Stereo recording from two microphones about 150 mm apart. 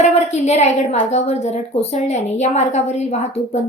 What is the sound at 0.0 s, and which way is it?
A woman's voice, 50° left (ahead or behind).